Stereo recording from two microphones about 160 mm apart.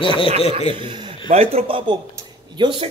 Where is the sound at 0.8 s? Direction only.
30° right (ahead or behind).